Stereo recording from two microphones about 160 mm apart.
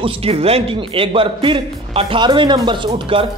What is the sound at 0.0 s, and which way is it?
A man's voice, 35° right (ahead or behind).